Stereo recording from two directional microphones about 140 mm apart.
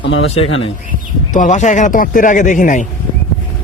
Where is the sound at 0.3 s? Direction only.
45° left (ahead or behind).